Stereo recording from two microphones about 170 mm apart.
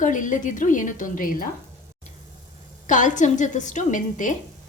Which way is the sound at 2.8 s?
50° left (ahead or behind).